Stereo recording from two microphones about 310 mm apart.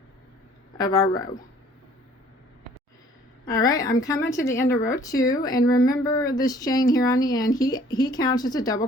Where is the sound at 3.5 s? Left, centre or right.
Centre.